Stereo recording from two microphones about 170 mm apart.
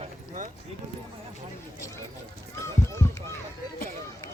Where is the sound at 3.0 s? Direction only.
15° left (ahead or behind).